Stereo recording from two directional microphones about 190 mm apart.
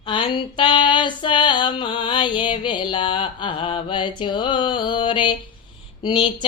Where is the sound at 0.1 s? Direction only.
25° left (ahead or behind).